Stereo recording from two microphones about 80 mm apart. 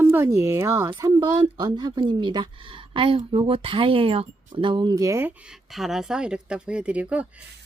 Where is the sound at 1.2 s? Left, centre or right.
Right.